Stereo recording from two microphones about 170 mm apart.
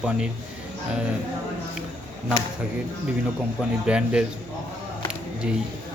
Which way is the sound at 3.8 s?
5° right (ahead or behind).